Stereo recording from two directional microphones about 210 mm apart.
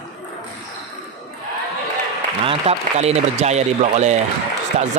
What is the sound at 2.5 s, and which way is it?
A man's voice, 30° right (ahead or behind).